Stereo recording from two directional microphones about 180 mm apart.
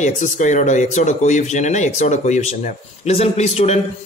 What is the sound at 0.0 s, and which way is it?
A man's voice, 40° left (ahead or behind).